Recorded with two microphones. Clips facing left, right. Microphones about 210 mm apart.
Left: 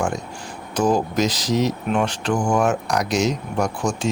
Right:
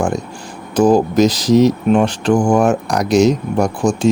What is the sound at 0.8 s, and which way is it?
Speech, 35° right (ahead or behind).